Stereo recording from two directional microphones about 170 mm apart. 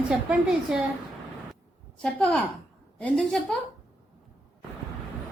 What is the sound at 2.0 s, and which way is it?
A woman's voice, 5° left (ahead or behind).